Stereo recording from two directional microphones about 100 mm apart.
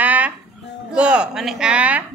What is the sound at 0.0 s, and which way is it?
Music, 15° right (ahead or behind).